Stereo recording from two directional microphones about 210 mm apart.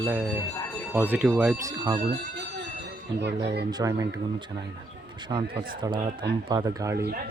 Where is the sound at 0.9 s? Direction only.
10° right (ahead or behind).